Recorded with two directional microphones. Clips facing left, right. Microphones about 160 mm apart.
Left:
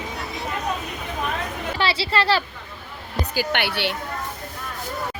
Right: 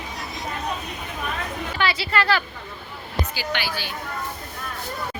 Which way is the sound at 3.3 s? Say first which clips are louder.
Left 4 dB; 55° left (ahead or behind).